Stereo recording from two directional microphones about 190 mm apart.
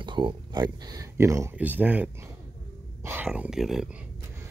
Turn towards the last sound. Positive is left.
turn(degrees=0)  # may be behind; listen again after turning